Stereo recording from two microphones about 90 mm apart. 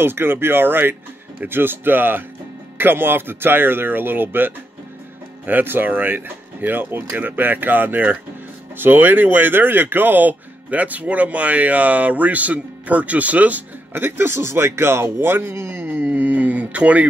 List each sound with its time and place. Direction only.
0.0 s speech: 25° right (ahead or behind)